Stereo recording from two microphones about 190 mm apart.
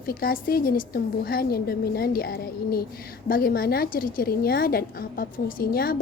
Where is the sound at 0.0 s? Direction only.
50° left (ahead or behind).